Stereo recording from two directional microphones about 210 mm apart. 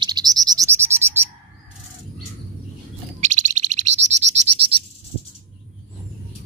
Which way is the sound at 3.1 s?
35° right (ahead or behind).